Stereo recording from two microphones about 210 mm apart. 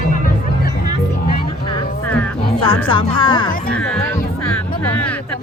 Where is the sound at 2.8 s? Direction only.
25° left (ahead or behind).